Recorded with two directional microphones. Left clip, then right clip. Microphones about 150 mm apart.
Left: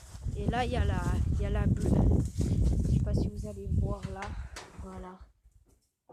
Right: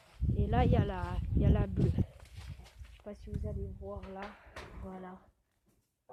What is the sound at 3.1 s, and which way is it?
Speech, 30° left (ahead or behind).